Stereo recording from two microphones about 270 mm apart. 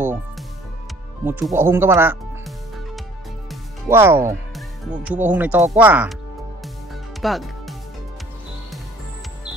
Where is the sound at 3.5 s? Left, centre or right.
Centre.